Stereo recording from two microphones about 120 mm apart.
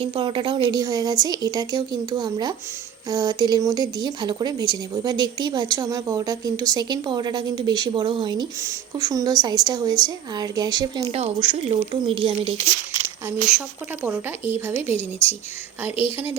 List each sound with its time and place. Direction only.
0.0 s a woman's voice: 45° right (ahead or behind)
11.1 s speech: 50° right (ahead or behind)
14.0 s speech: 15° right (ahead or behind)